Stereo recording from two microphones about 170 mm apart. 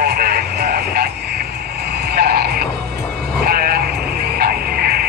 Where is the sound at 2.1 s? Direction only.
70° right (ahead or behind).